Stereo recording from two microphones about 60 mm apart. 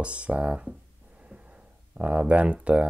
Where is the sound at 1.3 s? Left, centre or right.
Right.